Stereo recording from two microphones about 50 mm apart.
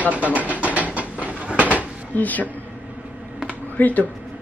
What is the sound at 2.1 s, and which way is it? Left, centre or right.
Speech, left.